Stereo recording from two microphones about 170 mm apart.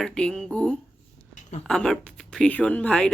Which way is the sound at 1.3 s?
45° left (ahead or behind).